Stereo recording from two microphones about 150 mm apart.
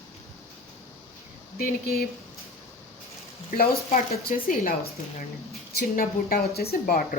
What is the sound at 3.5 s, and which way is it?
Speech, 90° left.